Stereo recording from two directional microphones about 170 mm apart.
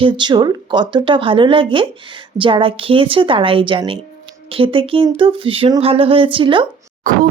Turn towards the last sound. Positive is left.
turn(degrees=-55)  # may be behind; listen again after turning